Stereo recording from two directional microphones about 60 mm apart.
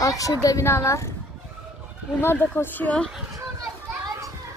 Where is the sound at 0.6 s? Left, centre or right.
Left.